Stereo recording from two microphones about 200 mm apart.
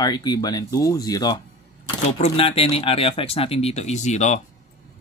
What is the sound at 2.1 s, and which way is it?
Speech, 35° left (ahead or behind).